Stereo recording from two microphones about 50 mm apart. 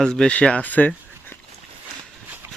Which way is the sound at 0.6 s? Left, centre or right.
Left.